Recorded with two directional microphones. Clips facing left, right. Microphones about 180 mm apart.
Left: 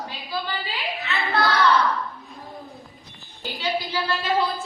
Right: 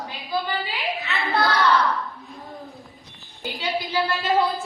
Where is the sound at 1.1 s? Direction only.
Centre (ahead or behind).